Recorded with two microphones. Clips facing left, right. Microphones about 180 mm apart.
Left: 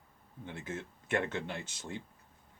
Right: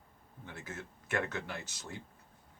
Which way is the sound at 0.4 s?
25° left (ahead or behind).